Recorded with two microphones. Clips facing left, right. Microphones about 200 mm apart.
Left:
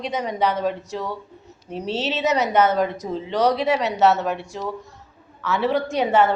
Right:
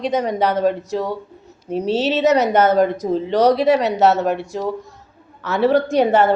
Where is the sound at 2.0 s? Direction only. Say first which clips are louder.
Right 6 dB; 40° right (ahead or behind).